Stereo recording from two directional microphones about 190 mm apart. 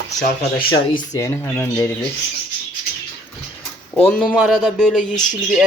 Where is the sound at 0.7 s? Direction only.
20° left (ahead or behind).